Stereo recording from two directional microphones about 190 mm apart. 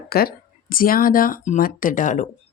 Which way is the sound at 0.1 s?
50° left (ahead or behind).